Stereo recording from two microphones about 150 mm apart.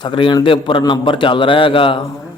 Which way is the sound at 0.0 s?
35° left (ahead or behind).